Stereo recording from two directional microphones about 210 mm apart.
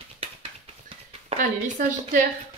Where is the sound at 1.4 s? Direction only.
35° right (ahead or behind).